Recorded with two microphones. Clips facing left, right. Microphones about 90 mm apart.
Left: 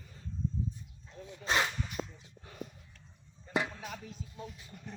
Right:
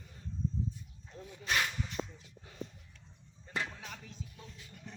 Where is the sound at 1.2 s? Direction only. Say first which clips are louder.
Left 3 dB; 25° left (ahead or behind).